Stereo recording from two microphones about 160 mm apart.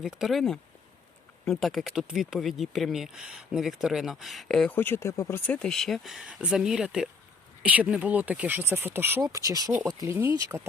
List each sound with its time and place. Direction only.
0.0 s speech: centre (ahead or behind); by 5.4 s 20° left (ahead or behind)
5.5 s speech: 5° left (ahead or behind); by 10.7 s 20° right (ahead or behind)